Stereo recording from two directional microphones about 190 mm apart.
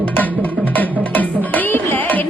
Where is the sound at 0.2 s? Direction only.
10° left (ahead or behind).